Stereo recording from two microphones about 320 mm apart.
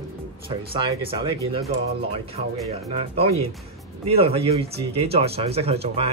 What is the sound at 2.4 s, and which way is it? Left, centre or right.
Speech, right.